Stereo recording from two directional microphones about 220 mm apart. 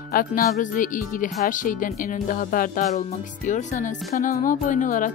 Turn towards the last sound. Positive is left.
turn(degrees=35)  # may be behind; listen again after turning